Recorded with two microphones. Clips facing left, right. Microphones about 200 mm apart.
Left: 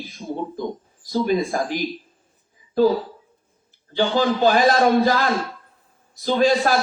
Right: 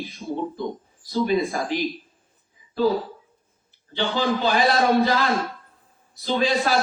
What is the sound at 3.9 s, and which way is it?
A man's voice, 45° left (ahead or behind).